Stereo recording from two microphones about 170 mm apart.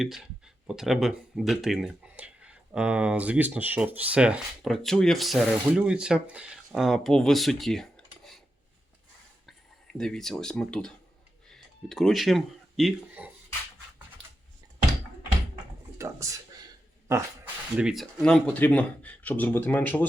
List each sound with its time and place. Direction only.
0.0 s speech: 5° right (ahead or behind)
9.5 s speech: 5° left (ahead or behind)
16.0 s a sound: 15° right (ahead or behind)
17.1 s speech: 15° right (ahead or behind)
17.7 s speech: centre (ahead or behind)